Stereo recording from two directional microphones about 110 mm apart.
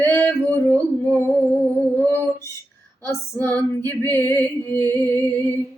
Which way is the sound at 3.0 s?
20° left (ahead or behind).